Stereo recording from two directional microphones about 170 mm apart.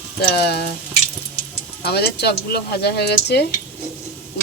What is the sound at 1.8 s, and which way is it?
Speech, 70° left (ahead or behind).